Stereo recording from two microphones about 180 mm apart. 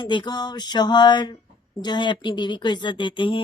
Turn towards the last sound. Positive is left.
turn(degrees=25)  # may be behind; listen again after turning